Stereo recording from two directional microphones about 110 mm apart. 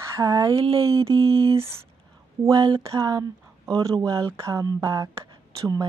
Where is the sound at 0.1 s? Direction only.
30° right (ahead or behind).